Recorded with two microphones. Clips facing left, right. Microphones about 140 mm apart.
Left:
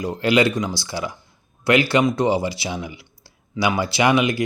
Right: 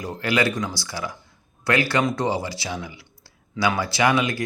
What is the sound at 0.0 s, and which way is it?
Speech, 20° left (ahead or behind).